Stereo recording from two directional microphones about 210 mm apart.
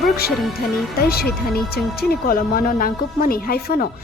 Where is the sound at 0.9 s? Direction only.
50° left (ahead or behind).